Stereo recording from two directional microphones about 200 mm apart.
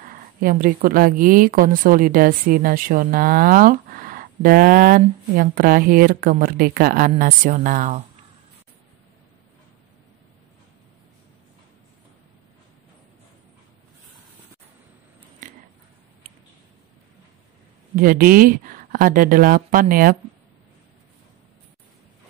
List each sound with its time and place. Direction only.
0.0 s a woman's voice: 45° right (ahead or behind)
15.4 s a sound: 40° right (ahead or behind)
17.9 s a woman's voice: 45° right (ahead or behind)